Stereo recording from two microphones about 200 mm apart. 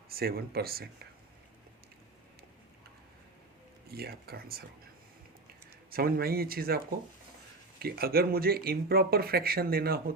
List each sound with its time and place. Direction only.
0.1 s speech: 50° right (ahead or behind)
3.9 s speech: 50° right (ahead or behind)
5.9 s speech: 50° right (ahead or behind)